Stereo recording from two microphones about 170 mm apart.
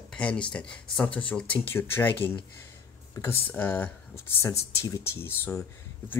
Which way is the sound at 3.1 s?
10° left (ahead or behind).